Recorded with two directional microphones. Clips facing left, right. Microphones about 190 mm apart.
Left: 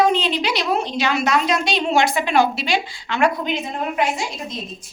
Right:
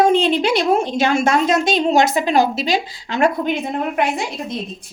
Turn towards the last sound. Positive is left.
turn(degrees=-60)  # may be behind; listen again after turning